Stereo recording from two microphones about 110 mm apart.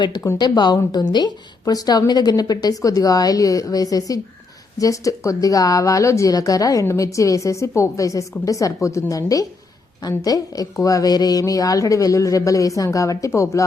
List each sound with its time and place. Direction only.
0.3 s a woman's voice: 40° left (ahead or behind)